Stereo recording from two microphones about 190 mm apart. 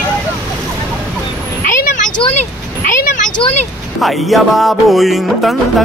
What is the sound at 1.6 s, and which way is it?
Vehicle, 45° left (ahead or behind).